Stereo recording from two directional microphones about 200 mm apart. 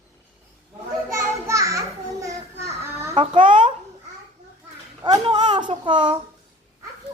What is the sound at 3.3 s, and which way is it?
Speech, 40° right (ahead or behind).